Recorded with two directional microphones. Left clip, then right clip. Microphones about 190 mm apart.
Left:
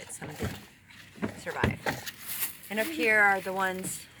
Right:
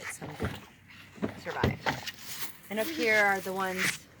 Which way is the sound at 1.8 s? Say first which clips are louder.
Right 1 dB; 60° left (ahead or behind).